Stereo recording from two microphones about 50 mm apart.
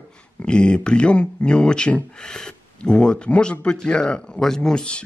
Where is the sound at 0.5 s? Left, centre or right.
Centre.